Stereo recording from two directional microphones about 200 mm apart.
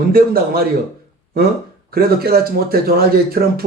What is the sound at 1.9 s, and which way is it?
A man's voice, 50° right (ahead or behind).